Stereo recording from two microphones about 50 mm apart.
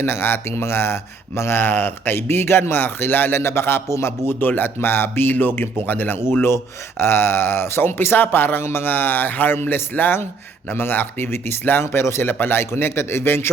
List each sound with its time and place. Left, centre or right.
0.1 s speech: left
3.8 s a man's voice: left
4.3 s speech: left
6.1 s speech: left
12.2 s speech: left